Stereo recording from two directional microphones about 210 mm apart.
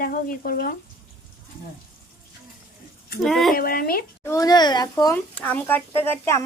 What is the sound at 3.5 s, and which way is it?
Speech, 45° left (ahead or behind).